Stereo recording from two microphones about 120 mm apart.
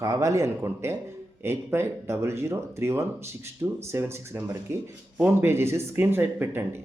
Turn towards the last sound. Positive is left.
turn(degrees=-20)  # may be behind; listen again after turning